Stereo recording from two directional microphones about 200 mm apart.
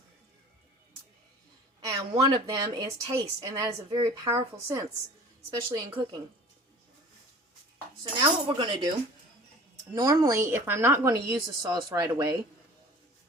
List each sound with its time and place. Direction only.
1.8 s a woman's voice: 15° right (ahead or behind)
8.2 s speech: 25° right (ahead or behind)
9.9 s a woman's voice: 20° right (ahead or behind)